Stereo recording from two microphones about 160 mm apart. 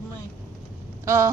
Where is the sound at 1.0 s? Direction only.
15° right (ahead or behind).